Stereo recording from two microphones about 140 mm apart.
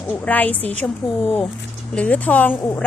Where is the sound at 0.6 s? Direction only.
45° right (ahead or behind).